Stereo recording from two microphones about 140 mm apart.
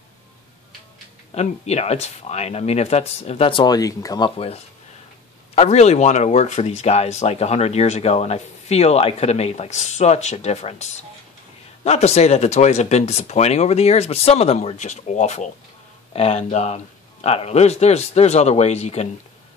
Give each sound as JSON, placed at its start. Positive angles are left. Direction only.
{"t": 1.3, "sound": "speech", "side_deg": 50}
{"t": 5.5, "sound": "speech", "side_deg": 50}